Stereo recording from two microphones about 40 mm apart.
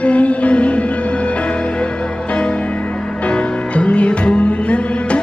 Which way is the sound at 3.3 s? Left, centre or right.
Left.